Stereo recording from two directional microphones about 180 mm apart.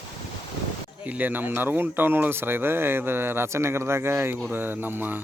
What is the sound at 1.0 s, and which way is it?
Speech, 10° right (ahead or behind).